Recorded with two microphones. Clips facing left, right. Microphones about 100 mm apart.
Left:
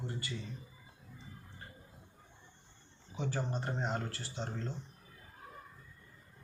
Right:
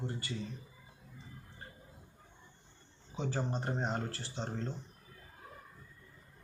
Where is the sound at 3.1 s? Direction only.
30° right (ahead or behind).